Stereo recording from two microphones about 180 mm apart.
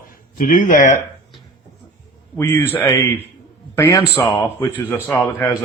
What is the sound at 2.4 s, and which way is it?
Speech, 15° left (ahead or behind).